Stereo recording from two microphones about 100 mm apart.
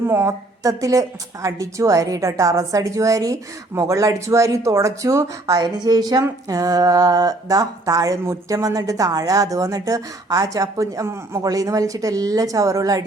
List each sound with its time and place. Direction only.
0.1 s speech: 30° right (ahead or behind)
5.5 s speech: 45° right (ahead or behind); by 11.4 s 25° right (ahead or behind)
11.4 s speech: 35° right (ahead or behind)